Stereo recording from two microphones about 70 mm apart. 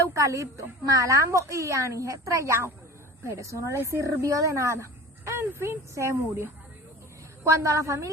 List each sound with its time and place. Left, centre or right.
0.0 s speech: right
7.5 s speech: right